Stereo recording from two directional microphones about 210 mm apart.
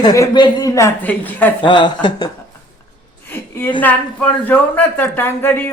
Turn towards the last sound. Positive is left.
turn(degrees=10)  # may be behind; listen again after turning